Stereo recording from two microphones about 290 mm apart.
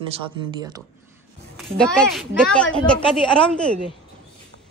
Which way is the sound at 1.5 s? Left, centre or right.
Centre.